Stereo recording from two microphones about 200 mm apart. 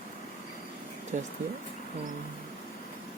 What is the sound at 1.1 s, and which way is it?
Speech, 40° right (ahead or behind).